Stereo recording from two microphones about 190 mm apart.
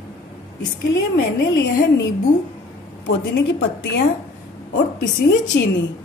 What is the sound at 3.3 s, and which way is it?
Speech, 65° left (ahead or behind).